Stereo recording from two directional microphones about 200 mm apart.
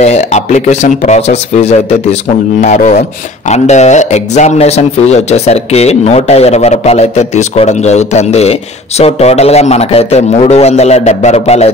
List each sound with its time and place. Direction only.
0.0 s a man's voice: 35° left (ahead or behind)